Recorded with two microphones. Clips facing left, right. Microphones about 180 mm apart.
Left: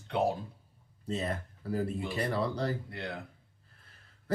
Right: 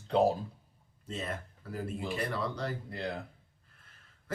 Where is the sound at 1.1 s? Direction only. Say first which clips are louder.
Left 4 dB; 40° left (ahead or behind).